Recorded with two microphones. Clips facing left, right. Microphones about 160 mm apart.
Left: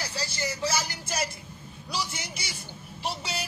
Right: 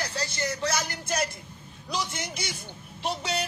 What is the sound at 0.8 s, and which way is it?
Speech, 60° right (ahead or behind).